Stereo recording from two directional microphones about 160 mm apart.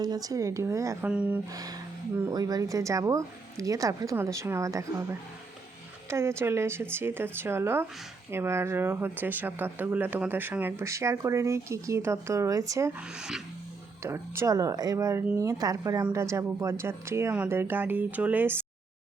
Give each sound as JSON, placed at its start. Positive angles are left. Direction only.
{"t": 0.0, "sound": "speech", "side_deg": -25}
{"t": 1.1, "sound": "speech", "side_deg": -10}
{"t": 1.5, "sound": "speech", "side_deg": -20}
{"t": 13.1, "sound": "music", "side_deg": -5}
{"t": 14.0, "sound": "speech", "side_deg": -15}